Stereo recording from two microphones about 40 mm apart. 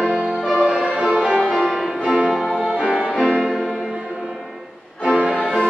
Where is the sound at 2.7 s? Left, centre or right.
Right.